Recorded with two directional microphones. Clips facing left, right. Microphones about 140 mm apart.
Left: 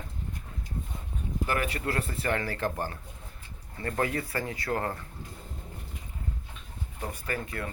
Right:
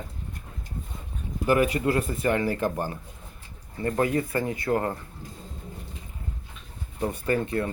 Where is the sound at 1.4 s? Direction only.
15° right (ahead or behind).